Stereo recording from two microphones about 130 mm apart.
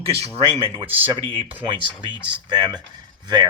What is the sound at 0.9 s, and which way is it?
Speech, 45° right (ahead or behind).